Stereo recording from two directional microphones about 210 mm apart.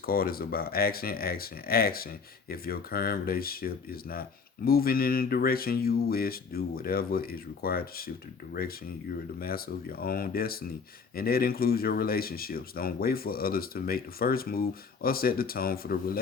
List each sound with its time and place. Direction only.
0.0 s speech: 45° left (ahead or behind)